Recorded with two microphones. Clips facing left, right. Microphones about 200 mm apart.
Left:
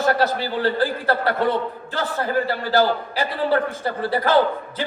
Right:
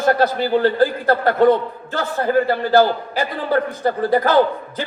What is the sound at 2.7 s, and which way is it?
A man's voice, 50° right (ahead or behind).